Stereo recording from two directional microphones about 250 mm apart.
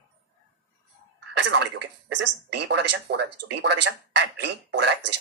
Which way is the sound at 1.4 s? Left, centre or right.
Right.